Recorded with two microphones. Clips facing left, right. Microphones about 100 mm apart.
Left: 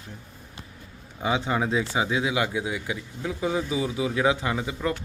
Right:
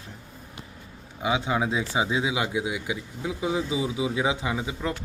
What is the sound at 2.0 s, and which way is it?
Speech, 20° right (ahead or behind).